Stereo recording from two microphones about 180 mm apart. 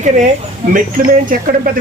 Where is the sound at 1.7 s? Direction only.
50° right (ahead or behind).